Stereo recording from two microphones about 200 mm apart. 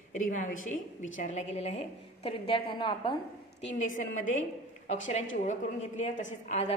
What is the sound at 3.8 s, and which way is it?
A woman's voice, 40° left (ahead or behind).